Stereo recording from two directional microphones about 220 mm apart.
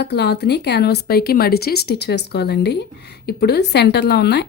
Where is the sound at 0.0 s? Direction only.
50° left (ahead or behind).